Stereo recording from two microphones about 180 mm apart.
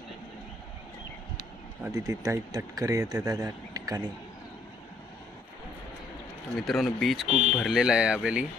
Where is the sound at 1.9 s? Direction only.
20° right (ahead or behind).